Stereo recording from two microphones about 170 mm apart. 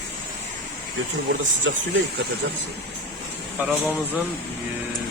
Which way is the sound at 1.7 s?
90° right.